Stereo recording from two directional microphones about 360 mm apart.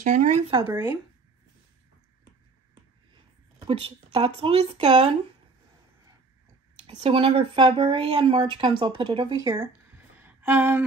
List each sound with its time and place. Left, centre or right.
0.0 s speech: centre
3.5 s speech: centre
7.0 s speech: centre
9.9 s a sound: centre